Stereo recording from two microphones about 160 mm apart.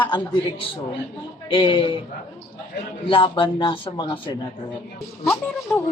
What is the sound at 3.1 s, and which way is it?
Speech, 30° left (ahead or behind).